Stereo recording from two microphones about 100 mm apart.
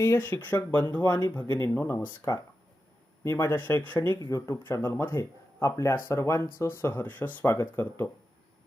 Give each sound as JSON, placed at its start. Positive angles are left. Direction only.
{"t": 0.0, "sound": "speech", "side_deg": 25}
{"t": 1.0, "sound": "speech", "side_deg": 45}
{"t": 1.5, "sound": "speech", "side_deg": 25}
{"t": 4.2, "sound": "speech", "side_deg": 30}